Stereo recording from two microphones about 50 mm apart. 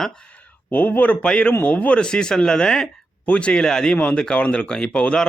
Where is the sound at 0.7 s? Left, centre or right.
Left.